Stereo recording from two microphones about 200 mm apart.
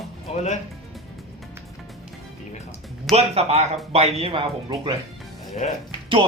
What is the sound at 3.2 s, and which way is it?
Speech, 30° right (ahead or behind).